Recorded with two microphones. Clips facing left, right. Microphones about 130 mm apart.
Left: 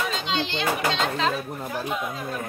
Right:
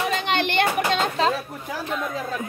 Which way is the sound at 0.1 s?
60° right (ahead or behind).